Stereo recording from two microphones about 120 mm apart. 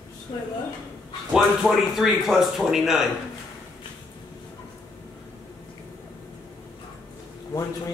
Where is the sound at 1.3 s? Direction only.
5° right (ahead or behind).